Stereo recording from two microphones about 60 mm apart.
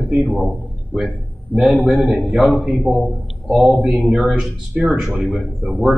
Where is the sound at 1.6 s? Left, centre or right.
Centre.